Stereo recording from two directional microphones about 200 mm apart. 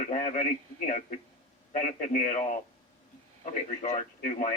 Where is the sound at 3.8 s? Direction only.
35° left (ahead or behind).